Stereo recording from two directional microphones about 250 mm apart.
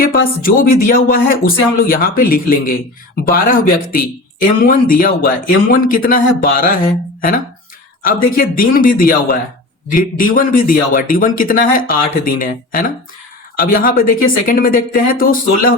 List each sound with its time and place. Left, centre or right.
0.4 s speech: left